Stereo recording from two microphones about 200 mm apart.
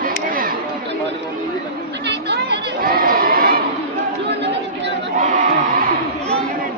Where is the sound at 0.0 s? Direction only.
45° right (ahead or behind).